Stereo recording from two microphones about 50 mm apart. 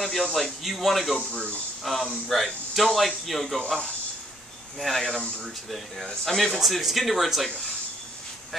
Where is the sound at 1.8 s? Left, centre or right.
Centre.